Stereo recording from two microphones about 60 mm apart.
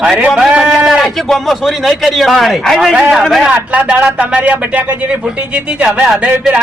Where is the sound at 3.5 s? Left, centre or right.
Right.